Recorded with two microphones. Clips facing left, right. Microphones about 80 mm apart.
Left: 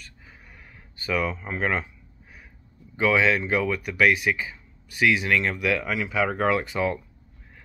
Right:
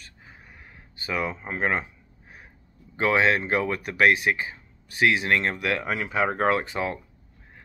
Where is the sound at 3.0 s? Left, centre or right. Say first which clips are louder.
Even; right.